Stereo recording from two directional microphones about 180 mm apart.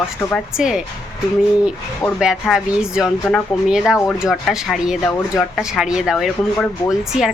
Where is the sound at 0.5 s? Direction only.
5° right (ahead or behind).